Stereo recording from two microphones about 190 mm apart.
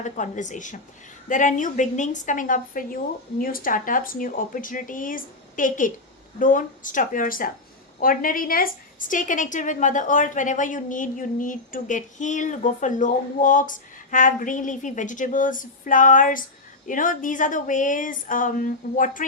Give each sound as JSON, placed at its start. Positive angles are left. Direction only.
{"t": 0.0, "sound": "a woman's voice", "side_deg": 40}